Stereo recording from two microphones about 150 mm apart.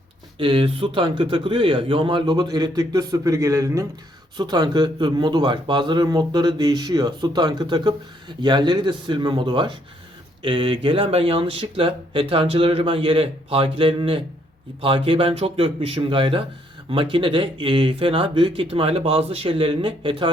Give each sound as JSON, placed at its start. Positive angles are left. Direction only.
{"t": 0.3, "sound": "a man's voice", "side_deg": -35}